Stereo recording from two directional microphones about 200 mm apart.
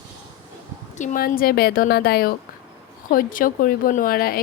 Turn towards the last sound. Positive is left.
turn(degrees=45)  # may be behind; listen again after turning